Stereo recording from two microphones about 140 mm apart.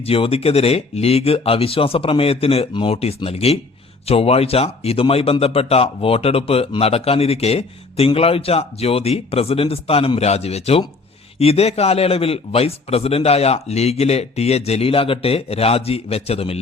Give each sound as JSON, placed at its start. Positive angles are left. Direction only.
{"t": 0.0, "sound": "speech", "side_deg": 45}